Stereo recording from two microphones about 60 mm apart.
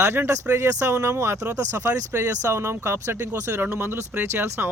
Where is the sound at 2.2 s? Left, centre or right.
Right.